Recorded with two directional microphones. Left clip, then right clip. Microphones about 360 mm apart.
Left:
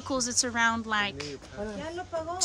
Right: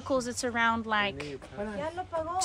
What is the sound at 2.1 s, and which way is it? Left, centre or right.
Speech, centre.